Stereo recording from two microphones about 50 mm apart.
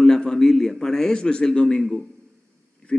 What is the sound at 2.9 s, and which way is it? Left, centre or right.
Speech, centre.